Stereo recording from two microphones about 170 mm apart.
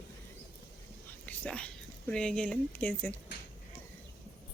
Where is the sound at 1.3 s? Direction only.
5° left (ahead or behind).